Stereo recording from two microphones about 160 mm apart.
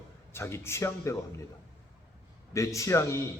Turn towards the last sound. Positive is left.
turn(degrees=20)  # may be behind; listen again after turning